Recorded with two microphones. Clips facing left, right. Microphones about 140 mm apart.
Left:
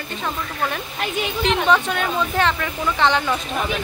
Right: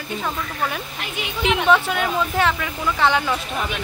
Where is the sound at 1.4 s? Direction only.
5° right (ahead or behind).